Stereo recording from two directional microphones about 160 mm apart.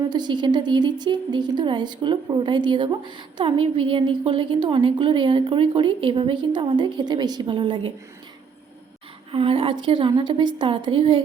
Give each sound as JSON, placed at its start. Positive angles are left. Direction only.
{"t": 0.1, "sound": "speech", "side_deg": -25}
{"t": 9.3, "sound": "a woman's voice", "side_deg": -35}